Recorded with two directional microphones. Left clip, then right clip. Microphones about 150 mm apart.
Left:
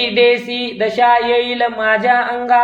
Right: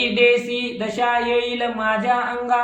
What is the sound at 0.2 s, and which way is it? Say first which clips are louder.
Speech: left 4 dB; 25° left (ahead or behind).